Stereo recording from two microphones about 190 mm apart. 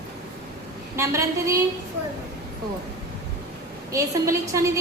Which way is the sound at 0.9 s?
15° right (ahead or behind).